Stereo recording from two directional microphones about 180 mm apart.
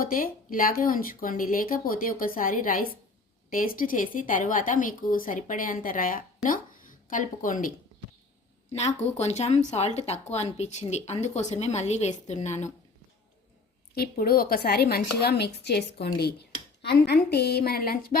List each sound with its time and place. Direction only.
0.0 s speech: 50° left (ahead or behind)
8.7 s a woman's voice: 35° left (ahead or behind)
13.9 s a woman's voice: 60° left (ahead or behind)